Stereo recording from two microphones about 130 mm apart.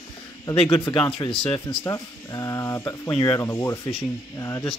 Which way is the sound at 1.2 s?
30° left (ahead or behind).